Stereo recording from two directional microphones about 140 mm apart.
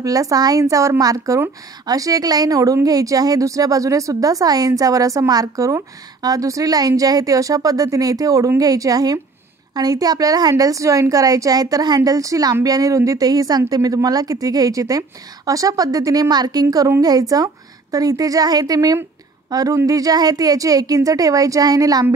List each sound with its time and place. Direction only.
0.0 s a woman's voice: 25° right (ahead or behind)